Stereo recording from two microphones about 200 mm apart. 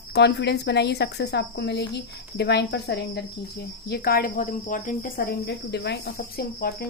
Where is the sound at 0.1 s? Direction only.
60° left (ahead or behind).